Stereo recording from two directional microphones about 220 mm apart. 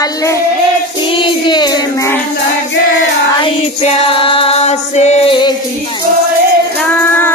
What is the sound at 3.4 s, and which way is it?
Music, 25° left (ahead or behind).